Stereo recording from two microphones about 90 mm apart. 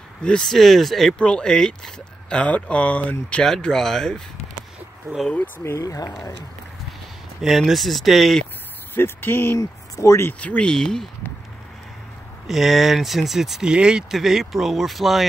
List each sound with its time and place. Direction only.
0.2 s speech: 10° left (ahead or behind)
5.1 s speech: 30° right (ahead or behind)
5.6 s speech: 35° left (ahead or behind)
7.4 s speech: centre (ahead or behind)
8.9 s speech: 25° left (ahead or behind)
9.6 s speech: 35° left (ahead or behind)
10.4 s speech: 15° left (ahead or behind)
12.4 s speech: centre (ahead or behind)